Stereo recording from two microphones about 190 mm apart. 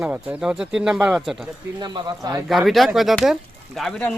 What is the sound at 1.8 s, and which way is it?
Speech, 20° right (ahead or behind).